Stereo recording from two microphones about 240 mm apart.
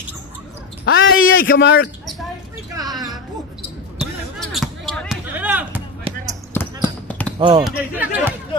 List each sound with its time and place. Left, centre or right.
0.8 s a sound: left
1.2 s a man's voice: left
4.0 s basketball bounce: centre
6.1 s basketball bounce: right
6.5 s basketball bounce: centre
7.3 s speech: centre
7.6 s speech: centre